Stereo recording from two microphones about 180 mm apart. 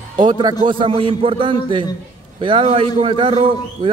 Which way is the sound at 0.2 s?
25° right (ahead or behind).